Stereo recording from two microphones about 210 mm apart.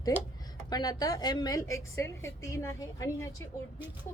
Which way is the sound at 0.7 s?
20° left (ahead or behind).